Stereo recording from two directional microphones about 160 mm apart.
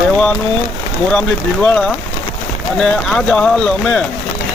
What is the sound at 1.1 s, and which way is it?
Speech, 5° left (ahead or behind).